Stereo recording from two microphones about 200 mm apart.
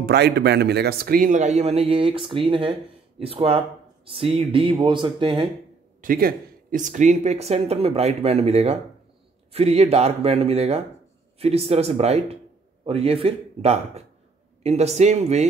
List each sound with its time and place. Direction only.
0.0 s speech: 55° right (ahead or behind); by 5.5 s 25° right (ahead or behind)
5.9 s speech: 45° right (ahead or behind)